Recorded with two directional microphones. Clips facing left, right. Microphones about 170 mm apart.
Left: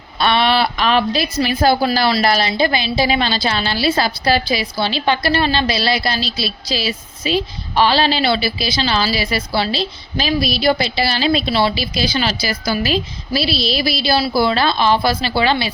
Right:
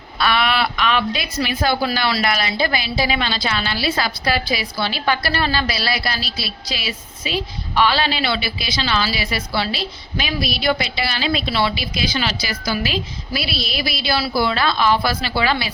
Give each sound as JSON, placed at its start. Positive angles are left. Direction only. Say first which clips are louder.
{"t": 0.2, "sound": "a woman's voice", "louder": "left 4 dB", "side_deg": 30}